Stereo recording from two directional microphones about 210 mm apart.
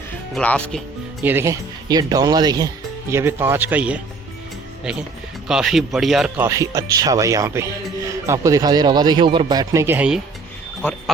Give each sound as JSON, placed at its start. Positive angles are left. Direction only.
{"t": 0.3, "sound": "speech", "side_deg": 5}
{"t": 1.2, "sound": "speech", "side_deg": -10}